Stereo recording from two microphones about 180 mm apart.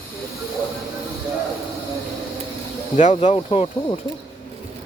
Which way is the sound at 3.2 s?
35° left (ahead or behind).